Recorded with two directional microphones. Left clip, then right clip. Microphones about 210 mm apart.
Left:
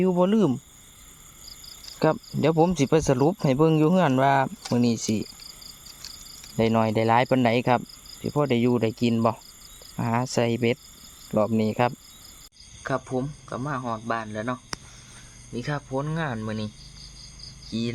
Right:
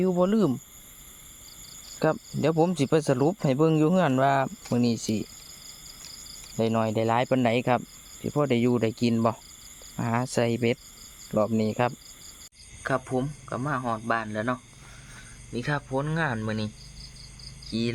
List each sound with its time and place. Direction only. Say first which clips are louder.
0.0 s speech: left 2 dB; 15° left (ahead or behind)
2.0 s speech: left 2 dB; 15° left (ahead or behind)
6.6 s speech: left 3 dB; 25° left (ahead or behind)
12.8 s speech: even; centre (ahead or behind)
17.7 s cricket: right 1 dB; 5° left (ahead or behind)